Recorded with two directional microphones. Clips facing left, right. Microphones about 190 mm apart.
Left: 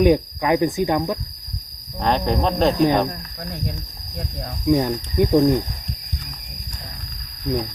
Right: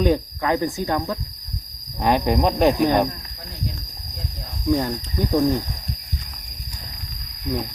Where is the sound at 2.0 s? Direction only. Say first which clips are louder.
Right 1 dB; 10° right (ahead or behind).